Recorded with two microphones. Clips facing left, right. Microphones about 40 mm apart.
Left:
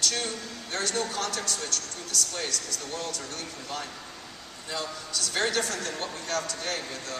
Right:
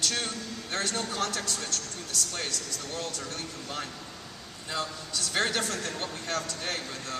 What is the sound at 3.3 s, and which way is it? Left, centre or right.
Speech, right.